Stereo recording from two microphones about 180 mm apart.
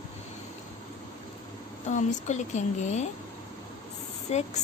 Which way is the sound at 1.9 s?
40° left (ahead or behind).